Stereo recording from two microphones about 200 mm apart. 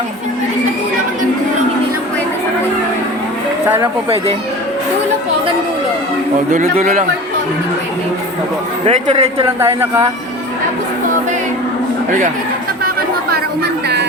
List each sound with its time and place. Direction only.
6.5 s a man's voice: 40° right (ahead or behind)
8.9 s a man's voice: 35° right (ahead or behind)
9.6 s speech: 15° right (ahead or behind)